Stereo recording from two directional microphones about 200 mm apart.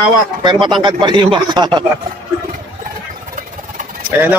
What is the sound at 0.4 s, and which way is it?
Speech, 20° right (ahead or behind).